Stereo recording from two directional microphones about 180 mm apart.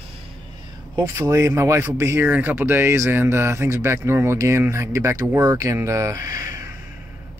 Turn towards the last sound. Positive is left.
turn(degrees=-15)  # may be behind; listen again after turning